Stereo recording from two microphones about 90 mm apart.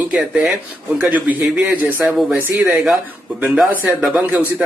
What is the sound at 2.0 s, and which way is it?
Speech, centre (ahead or behind).